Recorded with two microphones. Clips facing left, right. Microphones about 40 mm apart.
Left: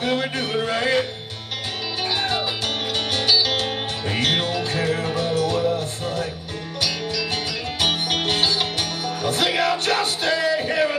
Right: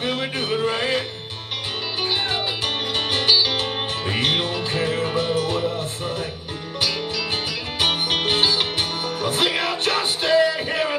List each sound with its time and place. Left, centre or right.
0.7 s music: centre
2.9 s music: right
7.8 s music: right